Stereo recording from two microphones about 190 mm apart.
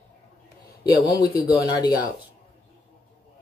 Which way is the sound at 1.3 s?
20° left (ahead or behind).